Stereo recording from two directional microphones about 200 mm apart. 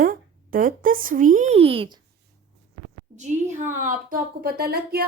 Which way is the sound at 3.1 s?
35° right (ahead or behind).